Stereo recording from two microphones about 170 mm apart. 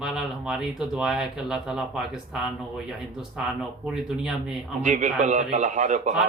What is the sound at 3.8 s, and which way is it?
Speech, centre (ahead or behind).